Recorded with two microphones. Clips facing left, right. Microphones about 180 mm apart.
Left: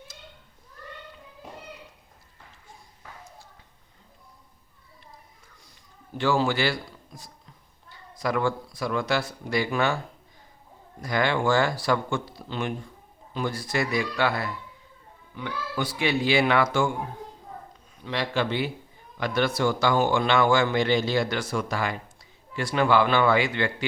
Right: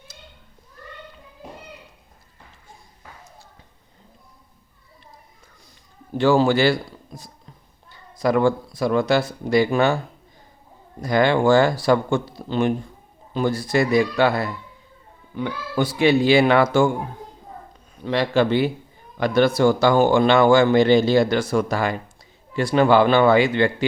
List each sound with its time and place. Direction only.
6.1 s a man's voice: 35° right (ahead or behind)
8.2 s speech: 30° right (ahead or behind)
11.0 s a man's voice: 30° right (ahead or behind)
18.0 s a man's voice: 40° right (ahead or behind)